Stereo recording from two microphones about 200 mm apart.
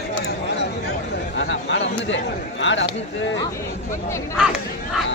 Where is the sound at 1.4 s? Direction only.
65° left (ahead or behind).